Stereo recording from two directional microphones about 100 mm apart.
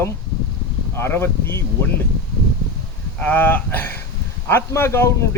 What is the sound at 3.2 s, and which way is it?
A man's voice, 15° left (ahead or behind).